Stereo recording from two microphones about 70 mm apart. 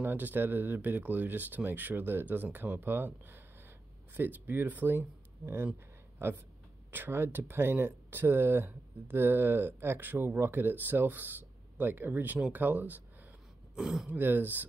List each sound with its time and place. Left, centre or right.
0.0 s speech: right
6.9 s speech: right
13.7 s speech: centre
14.0 s speech: right